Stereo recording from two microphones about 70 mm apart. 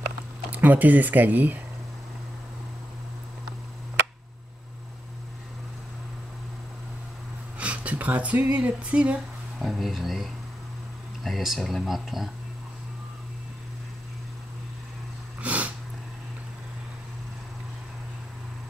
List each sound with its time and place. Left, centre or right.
0.5 s speech: right
7.5 s speech: centre
9.6 s speech: centre
15.4 s cat: right